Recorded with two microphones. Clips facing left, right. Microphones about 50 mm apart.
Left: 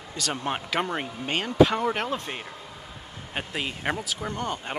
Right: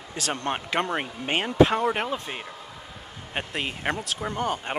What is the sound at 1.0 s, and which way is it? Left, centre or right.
Speech, right.